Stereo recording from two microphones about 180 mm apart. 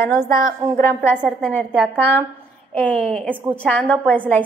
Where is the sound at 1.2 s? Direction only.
5° left (ahead or behind).